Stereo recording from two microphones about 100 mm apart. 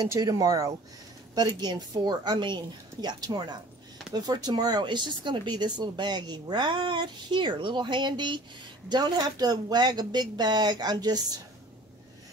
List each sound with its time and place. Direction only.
0.2 s speech: 40° right (ahead or behind)